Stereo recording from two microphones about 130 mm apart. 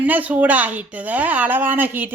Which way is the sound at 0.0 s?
10° right (ahead or behind).